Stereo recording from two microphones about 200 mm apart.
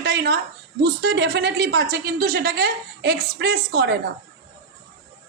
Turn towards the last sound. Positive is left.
turn(degrees=-55)  # may be behind; listen again after turning